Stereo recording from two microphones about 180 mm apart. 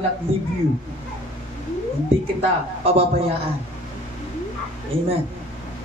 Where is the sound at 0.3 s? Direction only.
30° right (ahead or behind).